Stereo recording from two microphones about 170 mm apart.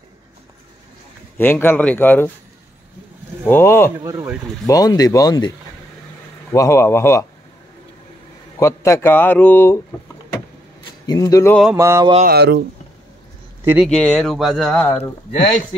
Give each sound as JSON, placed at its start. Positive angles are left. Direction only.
{"t": 1.4, "sound": "a man's voice", "side_deg": 10}
{"t": 3.4, "sound": "a man's voice", "side_deg": 15}
{"t": 4.0, "sound": "mantra", "side_deg": -20}
{"t": 4.6, "sound": "speech", "side_deg": 20}
{"t": 6.5, "sound": "a man's voice", "side_deg": 20}
{"t": 8.5, "sound": "a man's voice", "side_deg": 15}
{"t": 11.1, "sound": "speech", "side_deg": 20}
{"t": 11.7, "sound": "mantra", "side_deg": -20}
{"t": 12.3, "sound": "speech", "side_deg": -75}
{"t": 13.8, "sound": "speech", "side_deg": 5}
{"t": 15.0, "sound": "speech", "side_deg": 40}